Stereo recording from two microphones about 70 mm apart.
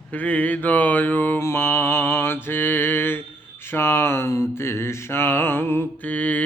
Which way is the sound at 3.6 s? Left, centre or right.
Left.